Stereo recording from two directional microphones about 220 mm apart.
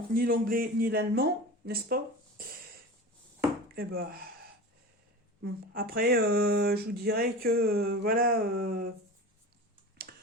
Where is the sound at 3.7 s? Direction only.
40° right (ahead or behind).